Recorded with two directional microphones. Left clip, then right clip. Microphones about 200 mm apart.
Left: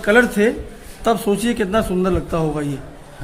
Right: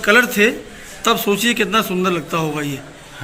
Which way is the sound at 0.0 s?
25° left (ahead or behind).